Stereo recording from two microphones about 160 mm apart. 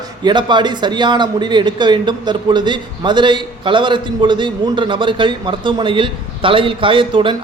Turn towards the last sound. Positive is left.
turn(degrees=-30)  # may be behind; listen again after turning